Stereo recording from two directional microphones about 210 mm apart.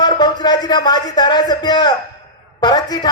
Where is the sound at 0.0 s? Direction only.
20° left (ahead or behind).